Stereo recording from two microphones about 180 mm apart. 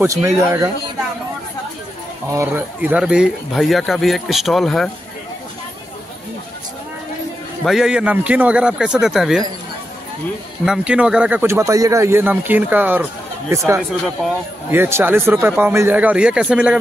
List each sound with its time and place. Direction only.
0.0 s speech: 15° right (ahead or behind)
2.3 s speech: 10° right (ahead or behind)
7.6 s speech: 5° right (ahead or behind)
10.6 s speech: 5° right (ahead or behind)
14.7 s speech: 10° right (ahead or behind)